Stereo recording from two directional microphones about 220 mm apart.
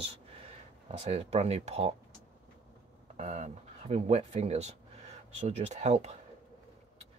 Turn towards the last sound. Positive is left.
turn(degrees=-30)  # may be behind; listen again after turning